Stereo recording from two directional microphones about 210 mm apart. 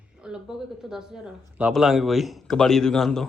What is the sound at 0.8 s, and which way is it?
A man's voice, 5° right (ahead or behind).